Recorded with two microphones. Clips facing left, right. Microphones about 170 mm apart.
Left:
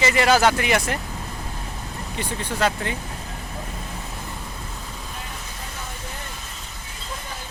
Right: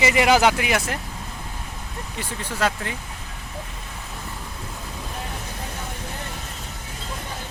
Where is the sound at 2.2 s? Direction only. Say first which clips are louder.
Left 2 dB; centre (ahead or behind).